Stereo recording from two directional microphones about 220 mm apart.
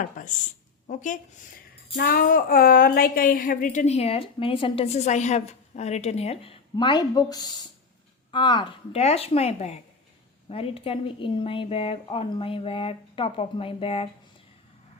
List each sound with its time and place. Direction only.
0.0 s a woman's voice: 35° left (ahead or behind)